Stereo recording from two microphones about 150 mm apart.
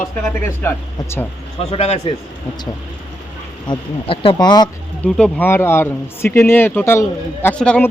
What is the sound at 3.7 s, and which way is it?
Speech, 35° left (ahead or behind).